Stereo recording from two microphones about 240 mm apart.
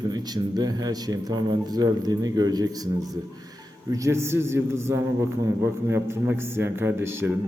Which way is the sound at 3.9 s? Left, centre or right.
Centre.